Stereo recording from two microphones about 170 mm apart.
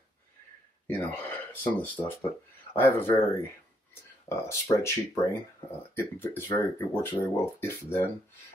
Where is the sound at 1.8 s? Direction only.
10° left (ahead or behind).